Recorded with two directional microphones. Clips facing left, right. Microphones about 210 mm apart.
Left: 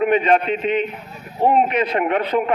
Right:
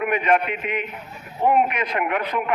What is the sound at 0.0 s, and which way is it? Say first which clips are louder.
A man's voice: left 4 dB; 30° left (ahead or behind).